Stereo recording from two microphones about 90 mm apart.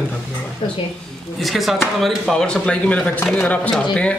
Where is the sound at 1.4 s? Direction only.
Centre (ahead or behind).